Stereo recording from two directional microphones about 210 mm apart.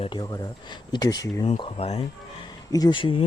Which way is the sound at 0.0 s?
20° left (ahead or behind).